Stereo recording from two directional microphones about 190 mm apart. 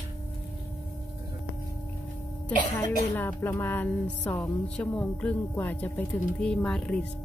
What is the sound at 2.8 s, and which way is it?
Speech, 10° left (ahead or behind).